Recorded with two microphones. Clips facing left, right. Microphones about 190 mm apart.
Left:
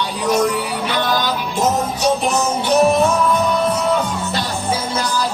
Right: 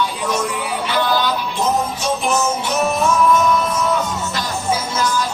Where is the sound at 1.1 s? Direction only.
45° left (ahead or behind).